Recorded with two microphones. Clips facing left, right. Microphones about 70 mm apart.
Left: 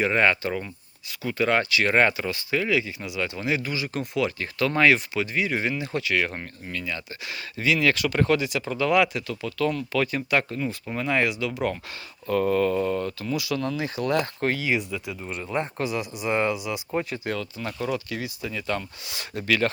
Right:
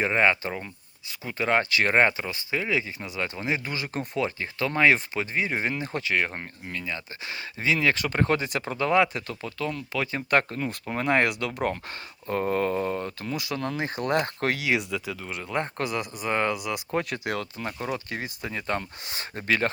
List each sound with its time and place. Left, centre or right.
0.0 s speech: right
3.7 s speech: right
9.7 s speech: right
10.2 s speech: right
12.3 s speech: right
14.4 s speech: right
17.6 s speech: right